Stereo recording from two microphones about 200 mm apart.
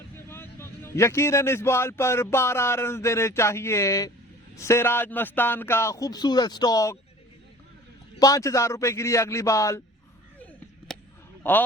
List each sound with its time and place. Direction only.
0.3 s a man's voice: 10° left (ahead or behind)
8.2 s a man's voice: 15° left (ahead or behind)
10.9 s a sound: centre (ahead or behind)